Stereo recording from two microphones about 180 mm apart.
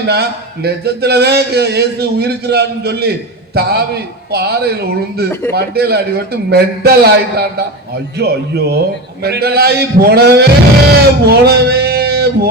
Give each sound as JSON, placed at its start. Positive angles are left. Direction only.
{"t": 0.1, "sound": "speech", "side_deg": -65}